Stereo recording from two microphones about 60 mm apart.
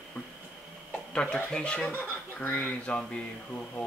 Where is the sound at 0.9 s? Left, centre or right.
Centre.